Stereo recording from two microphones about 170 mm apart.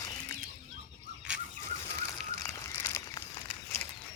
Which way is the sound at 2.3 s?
15° left (ahead or behind).